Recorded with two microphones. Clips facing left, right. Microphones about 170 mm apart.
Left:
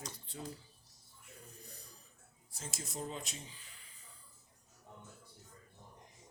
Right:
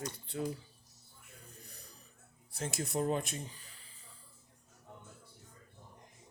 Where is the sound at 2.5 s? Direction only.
65° right (ahead or behind).